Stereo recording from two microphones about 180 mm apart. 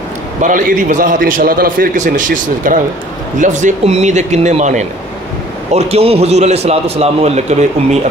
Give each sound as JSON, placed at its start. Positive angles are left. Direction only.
{"t": 0.4, "sound": "a man's voice", "side_deg": -45}